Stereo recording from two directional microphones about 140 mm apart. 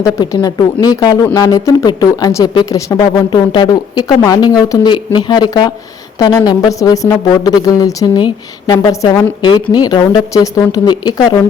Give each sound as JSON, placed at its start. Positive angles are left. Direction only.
{"t": 0.0, "sound": "speech", "side_deg": 25}
{"t": 3.2, "sound": "speech", "side_deg": 35}
{"t": 9.4, "sound": "speech", "side_deg": 30}